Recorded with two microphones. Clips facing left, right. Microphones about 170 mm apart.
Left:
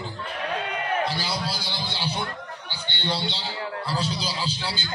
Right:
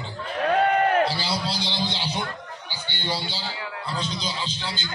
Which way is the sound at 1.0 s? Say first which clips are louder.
Right 3 dB; 30° right (ahead or behind).